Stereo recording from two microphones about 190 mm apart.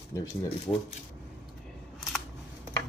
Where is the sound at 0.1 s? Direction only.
15° left (ahead or behind).